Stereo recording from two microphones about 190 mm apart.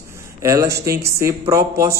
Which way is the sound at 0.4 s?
15° right (ahead or behind).